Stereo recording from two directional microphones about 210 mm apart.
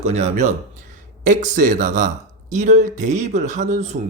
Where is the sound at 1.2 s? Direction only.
35° right (ahead or behind).